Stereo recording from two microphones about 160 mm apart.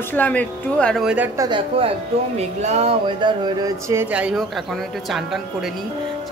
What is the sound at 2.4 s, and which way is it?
Speech, 40° right (ahead or behind).